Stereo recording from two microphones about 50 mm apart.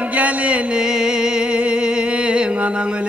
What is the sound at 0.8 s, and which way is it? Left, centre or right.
Music, centre.